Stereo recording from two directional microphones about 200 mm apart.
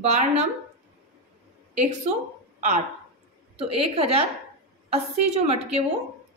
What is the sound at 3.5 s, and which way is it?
A woman's voice, 30° right (ahead or behind).